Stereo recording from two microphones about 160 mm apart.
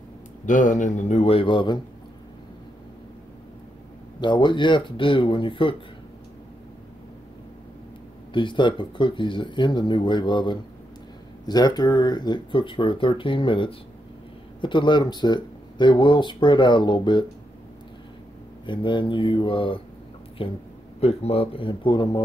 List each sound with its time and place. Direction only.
0.5 s speech: 55° left (ahead or behind); by 1.8 s 30° left (ahead or behind)
4.2 s speech: 30° left (ahead or behind)
8.3 s speech: 30° left (ahead or behind)
18.7 s speech: 30° left (ahead or behind)